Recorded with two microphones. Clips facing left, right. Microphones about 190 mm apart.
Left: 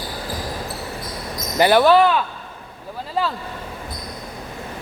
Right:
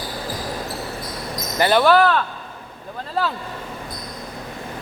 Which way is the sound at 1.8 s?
5° left (ahead or behind).